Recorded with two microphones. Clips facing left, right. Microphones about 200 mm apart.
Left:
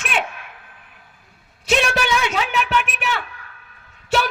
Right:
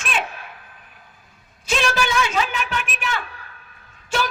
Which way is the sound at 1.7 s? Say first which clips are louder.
Left 3 dB; 65° left (ahead or behind).